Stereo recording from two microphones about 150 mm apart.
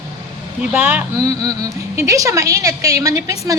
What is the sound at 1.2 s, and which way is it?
A woman's voice, 25° right (ahead or behind).